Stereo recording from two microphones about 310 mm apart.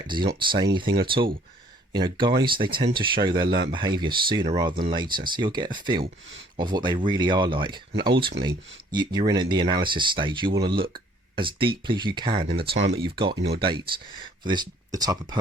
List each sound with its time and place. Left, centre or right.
0.1 s speech: centre
12.4 s speech: right
13.0 s speech: centre